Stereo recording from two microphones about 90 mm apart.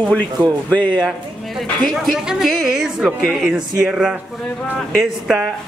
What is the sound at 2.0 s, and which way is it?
A woman's voice, 5° right (ahead or behind).